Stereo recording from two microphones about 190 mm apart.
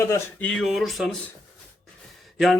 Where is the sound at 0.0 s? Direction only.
10° left (ahead or behind).